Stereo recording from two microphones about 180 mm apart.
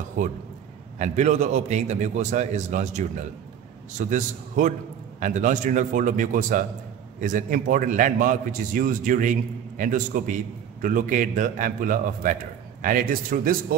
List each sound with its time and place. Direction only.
0.9 s a man's voice: 40° right (ahead or behind)